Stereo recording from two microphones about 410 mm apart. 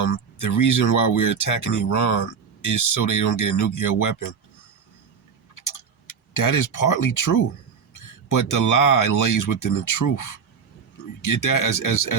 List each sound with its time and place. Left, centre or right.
0.0 s speech: left
6.3 s speech: left
11.3 s speech: left